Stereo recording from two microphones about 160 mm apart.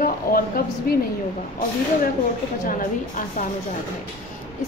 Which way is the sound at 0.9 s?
65° left (ahead or behind).